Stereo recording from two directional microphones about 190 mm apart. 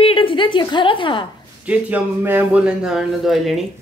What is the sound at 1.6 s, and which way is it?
A man's voice, 10° right (ahead or behind).